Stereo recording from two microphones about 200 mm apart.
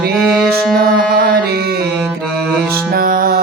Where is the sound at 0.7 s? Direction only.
50° right (ahead or behind).